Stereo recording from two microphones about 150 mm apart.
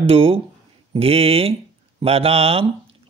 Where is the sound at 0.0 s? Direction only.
40° right (ahead or behind).